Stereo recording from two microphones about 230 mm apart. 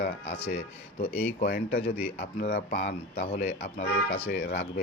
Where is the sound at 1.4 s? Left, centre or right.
Left.